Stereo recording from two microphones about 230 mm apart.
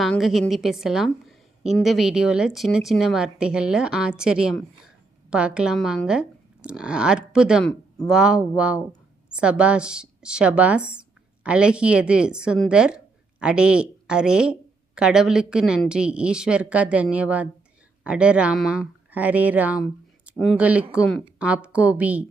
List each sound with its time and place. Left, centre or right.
0.0 s a woman's voice: centre